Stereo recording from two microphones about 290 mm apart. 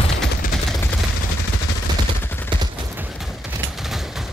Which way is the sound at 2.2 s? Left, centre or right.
Centre.